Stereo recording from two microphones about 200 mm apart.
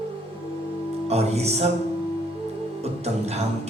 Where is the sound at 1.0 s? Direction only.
30° right (ahead or behind).